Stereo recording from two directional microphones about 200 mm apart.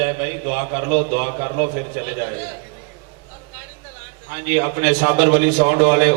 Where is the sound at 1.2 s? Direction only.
20° right (ahead or behind).